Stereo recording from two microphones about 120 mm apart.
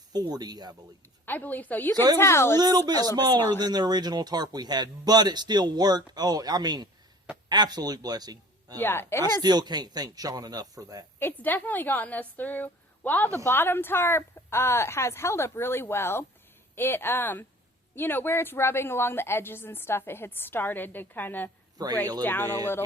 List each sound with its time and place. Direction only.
0.1 s speech: 35° right (ahead or behind)
1.2 s a woman's voice: 15° left (ahead or behind)
2.6 s speech: 35° right (ahead or behind)
8.8 s a woman's voice: 20° left (ahead or behind)
9.4 s speech: 35° right (ahead or behind)
11.2 s a woman's voice: 15° left (ahead or behind)
21.8 s speech: 35° right (ahead or behind)
22.2 s a woman's voice: 15° left (ahead or behind)